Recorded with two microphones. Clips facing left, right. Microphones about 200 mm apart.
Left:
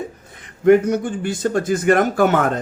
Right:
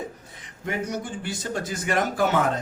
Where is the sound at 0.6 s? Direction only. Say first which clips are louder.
Left 16 dB; 55° left (ahead or behind).